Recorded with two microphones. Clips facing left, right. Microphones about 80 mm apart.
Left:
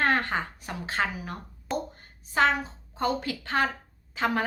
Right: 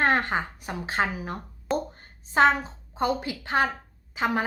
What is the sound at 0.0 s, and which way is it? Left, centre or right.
A woman's voice, right.